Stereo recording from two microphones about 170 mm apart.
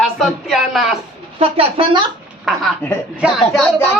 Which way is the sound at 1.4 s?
35° right (ahead or behind).